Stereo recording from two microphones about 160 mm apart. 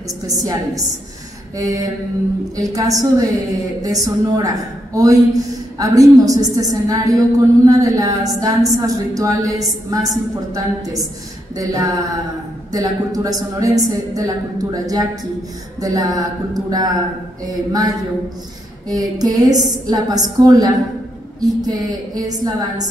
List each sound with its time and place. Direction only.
0.3 s a woman's voice: 20° right (ahead or behind)
18.9 s a woman's voice: 25° right (ahead or behind)